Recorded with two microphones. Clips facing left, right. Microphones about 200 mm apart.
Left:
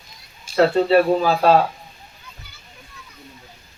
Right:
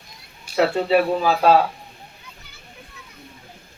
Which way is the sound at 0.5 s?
5° right (ahead or behind).